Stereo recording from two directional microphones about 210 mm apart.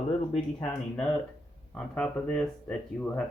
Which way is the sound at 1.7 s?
5° left (ahead or behind).